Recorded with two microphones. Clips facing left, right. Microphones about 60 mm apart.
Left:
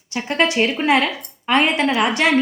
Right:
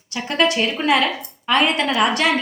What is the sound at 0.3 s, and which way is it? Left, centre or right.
A woman's voice, left.